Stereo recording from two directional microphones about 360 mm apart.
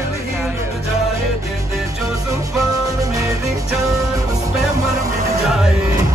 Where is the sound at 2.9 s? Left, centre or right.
Centre.